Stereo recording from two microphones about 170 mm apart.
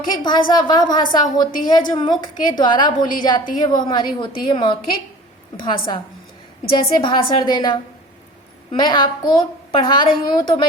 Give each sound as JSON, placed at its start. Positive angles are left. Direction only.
{"t": 0.2, "sound": "a woman's voice", "side_deg": 30}